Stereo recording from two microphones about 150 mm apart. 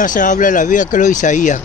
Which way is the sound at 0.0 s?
60° left (ahead or behind).